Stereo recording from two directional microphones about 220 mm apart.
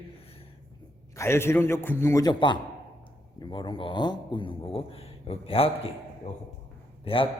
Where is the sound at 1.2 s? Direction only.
10° left (ahead or behind).